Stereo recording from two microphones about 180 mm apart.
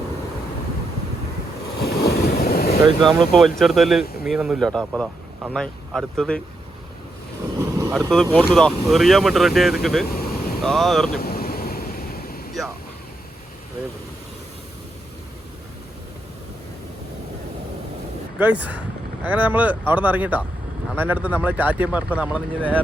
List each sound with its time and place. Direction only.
1.8 s vehicle: 60° left (ahead or behind)
3.0 s speech: centre (ahead or behind)
7.6 s vehicle: 20° right (ahead or behind)
8.1 s speech: 5° left (ahead or behind)
10.2 s vehicle: 55° left (ahead or behind)
10.6 s speech: centre (ahead or behind)
11.2 s waves: 55° left (ahead or behind)
19.2 s speech: 10° right (ahead or behind)